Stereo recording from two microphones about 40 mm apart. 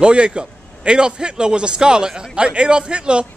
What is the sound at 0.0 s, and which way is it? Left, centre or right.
Speech, right.